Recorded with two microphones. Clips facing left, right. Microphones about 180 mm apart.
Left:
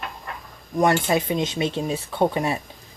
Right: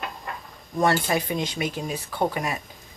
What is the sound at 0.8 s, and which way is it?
Speech, 20° left (ahead or behind).